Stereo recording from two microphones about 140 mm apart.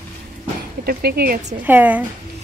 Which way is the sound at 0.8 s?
90° right.